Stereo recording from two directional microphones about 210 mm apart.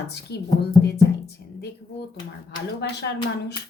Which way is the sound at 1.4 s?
50° left (ahead or behind).